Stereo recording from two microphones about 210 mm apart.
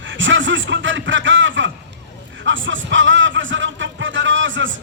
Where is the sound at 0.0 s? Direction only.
60° right (ahead or behind).